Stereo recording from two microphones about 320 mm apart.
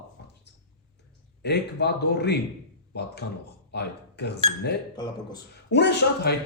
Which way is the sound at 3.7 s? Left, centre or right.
Left.